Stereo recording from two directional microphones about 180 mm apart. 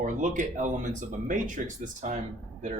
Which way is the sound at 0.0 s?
45° right (ahead or behind).